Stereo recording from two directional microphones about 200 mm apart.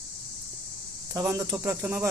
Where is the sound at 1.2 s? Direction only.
15° right (ahead or behind).